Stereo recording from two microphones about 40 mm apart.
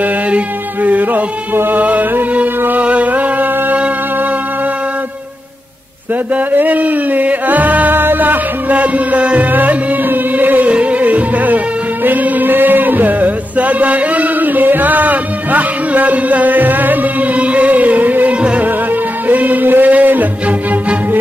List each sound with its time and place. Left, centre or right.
0.8 s music: right
6.3 s music: right
7.9 s music: right
9.5 s music: right
10.7 s music: right
17.4 s music: right